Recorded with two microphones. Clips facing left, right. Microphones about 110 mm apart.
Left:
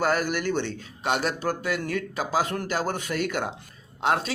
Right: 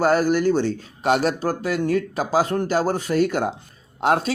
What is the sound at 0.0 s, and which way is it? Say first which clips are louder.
Speech: right 7 dB; 40° right (ahead or behind).